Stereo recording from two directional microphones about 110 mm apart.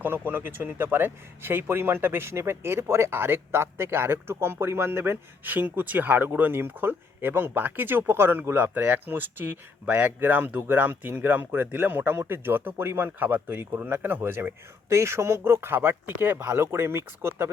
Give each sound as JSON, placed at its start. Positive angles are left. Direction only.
{"t": 0.0, "sound": "speech", "side_deg": -20}